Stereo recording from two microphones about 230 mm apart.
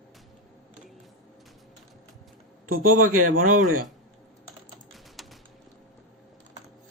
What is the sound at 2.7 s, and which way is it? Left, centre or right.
Speech, right.